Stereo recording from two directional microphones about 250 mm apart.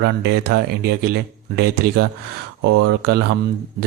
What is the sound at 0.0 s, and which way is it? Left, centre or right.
Speech, right.